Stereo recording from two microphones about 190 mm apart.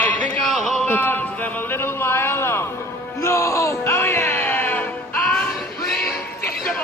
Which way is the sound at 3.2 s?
15° left (ahead or behind).